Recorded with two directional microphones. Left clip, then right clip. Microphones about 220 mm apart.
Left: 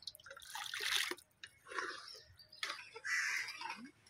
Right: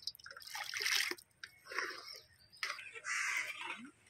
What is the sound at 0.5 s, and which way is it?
Water, centre (ahead or behind).